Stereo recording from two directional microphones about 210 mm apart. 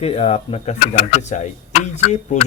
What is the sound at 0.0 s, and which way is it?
Speech, 30° left (ahead or behind).